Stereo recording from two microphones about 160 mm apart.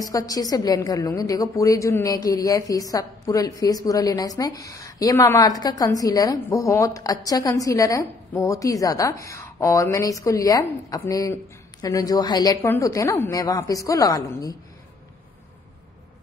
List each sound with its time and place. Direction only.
0.0 s a woman's voice: 20° left (ahead or behind)